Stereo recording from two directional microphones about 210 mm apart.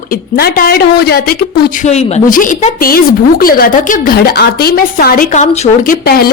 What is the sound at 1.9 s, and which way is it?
A woman's voice, 30° left (ahead or behind).